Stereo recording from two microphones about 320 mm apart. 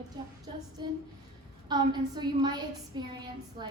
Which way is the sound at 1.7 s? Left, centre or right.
Centre.